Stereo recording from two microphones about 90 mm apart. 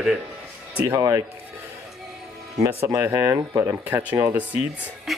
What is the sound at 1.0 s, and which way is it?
Speech, 40° right (ahead or behind).